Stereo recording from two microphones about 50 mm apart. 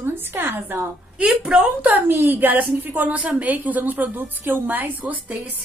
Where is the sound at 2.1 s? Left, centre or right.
Right.